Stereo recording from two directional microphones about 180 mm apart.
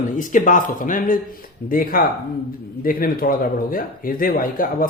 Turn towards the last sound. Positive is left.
turn(degrees=50)  # may be behind; listen again after turning